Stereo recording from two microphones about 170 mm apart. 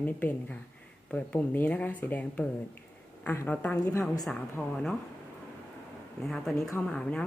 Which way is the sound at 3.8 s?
20° left (ahead or behind).